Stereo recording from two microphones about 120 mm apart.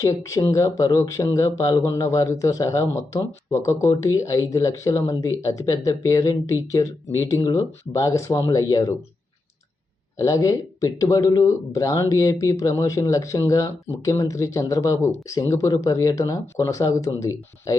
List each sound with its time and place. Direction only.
0.0 s speech: 25° left (ahead or behind)
10.2 s speech: 30° left (ahead or behind)